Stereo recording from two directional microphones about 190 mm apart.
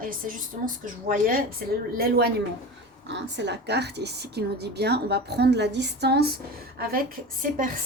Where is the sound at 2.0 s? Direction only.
55° right (ahead or behind).